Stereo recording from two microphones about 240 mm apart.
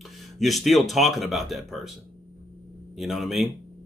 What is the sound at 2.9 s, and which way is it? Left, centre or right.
Speech, centre.